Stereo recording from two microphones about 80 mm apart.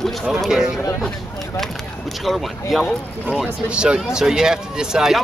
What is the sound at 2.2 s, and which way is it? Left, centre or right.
Speech, centre.